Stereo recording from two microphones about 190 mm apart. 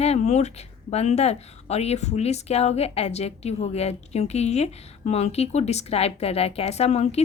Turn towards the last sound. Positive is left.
turn(degrees=35)  # may be behind; listen again after turning